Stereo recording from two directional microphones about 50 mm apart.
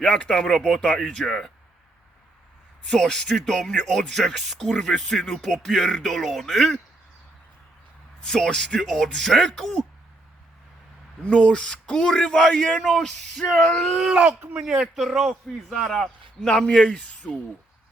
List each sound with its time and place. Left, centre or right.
0.2 s speech: centre
2.9 s speech: centre
8.2 s a man's voice: centre
11.2 s speech: left
14.1 s speech: centre
14.9 s a man's voice: centre
16.8 s speech: left